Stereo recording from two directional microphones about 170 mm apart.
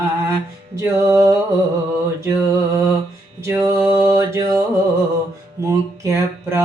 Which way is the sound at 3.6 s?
15° right (ahead or behind).